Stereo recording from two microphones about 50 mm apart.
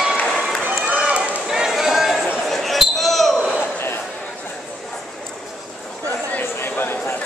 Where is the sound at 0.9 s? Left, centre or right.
Right.